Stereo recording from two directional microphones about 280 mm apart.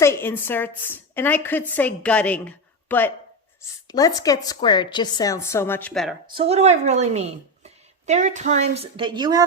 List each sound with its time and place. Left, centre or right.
0.0 s a woman's voice: centre
6.3 s a woman's voice: right